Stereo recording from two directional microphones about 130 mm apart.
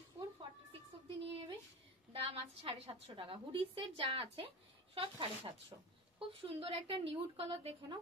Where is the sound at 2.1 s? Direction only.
45° right (ahead or behind).